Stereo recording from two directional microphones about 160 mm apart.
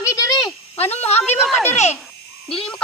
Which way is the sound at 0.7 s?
40° left (ahead or behind).